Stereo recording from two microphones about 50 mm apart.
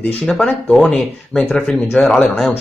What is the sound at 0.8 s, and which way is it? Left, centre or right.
Speech, left.